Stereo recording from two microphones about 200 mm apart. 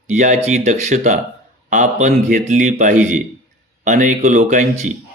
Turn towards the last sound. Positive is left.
turn(degrees=-35)  # may be behind; listen again after turning